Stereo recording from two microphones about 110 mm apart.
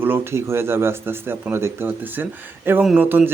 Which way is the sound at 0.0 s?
20° right (ahead or behind).